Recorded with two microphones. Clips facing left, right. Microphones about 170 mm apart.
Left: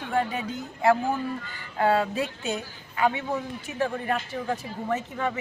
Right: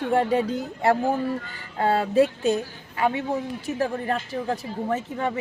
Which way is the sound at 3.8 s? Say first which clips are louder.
Even; 35° right (ahead or behind).